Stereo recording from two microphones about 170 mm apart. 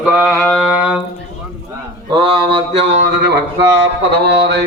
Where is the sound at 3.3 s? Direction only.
90° right.